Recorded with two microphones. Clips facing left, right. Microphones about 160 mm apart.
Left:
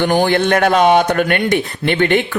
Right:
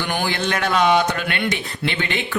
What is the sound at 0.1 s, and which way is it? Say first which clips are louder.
Speech: left 9 dB; 45° left (ahead or behind).